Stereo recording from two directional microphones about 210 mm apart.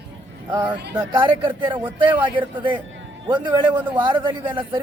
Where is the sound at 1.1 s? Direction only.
25° right (ahead or behind).